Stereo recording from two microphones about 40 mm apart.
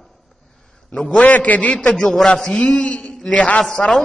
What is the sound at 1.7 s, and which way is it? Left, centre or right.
Speech, left.